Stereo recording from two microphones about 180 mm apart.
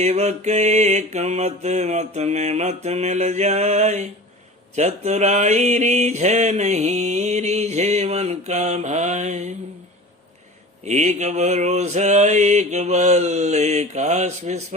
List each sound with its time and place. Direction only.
0.0 s mantra: 40° right (ahead or behind)
10.8 s mantra: 40° right (ahead or behind)